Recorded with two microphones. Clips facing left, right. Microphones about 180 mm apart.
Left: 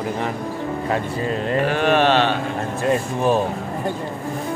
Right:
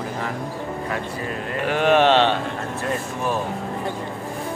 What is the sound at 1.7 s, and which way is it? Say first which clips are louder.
Speech: right 2 dB; 15° right (ahead or behind).